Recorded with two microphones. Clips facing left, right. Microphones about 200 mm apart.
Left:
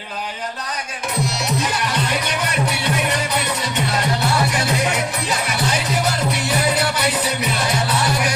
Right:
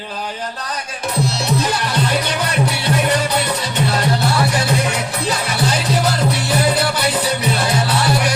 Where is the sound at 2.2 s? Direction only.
35° right (ahead or behind).